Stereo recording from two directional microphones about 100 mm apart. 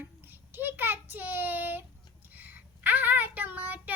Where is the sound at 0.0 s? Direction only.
20° right (ahead or behind).